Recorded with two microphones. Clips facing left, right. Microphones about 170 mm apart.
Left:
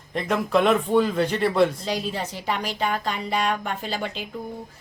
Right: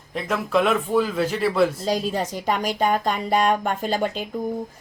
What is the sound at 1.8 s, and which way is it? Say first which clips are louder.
A woman's voice: right 4 dB; 40° right (ahead or behind).